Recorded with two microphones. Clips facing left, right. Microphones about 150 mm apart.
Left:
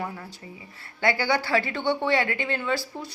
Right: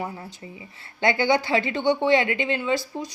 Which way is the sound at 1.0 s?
20° right (ahead or behind).